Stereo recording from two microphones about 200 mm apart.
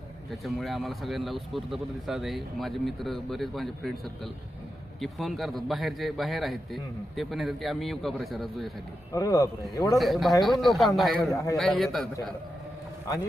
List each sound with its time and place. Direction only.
0.3 s speech: centre (ahead or behind)
9.1 s speech: 15° left (ahead or behind)
10.0 s speech: centre (ahead or behind)